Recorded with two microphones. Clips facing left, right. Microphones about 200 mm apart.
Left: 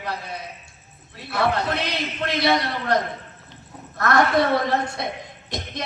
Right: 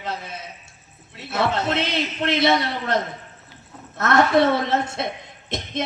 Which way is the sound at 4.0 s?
20° right (ahead or behind).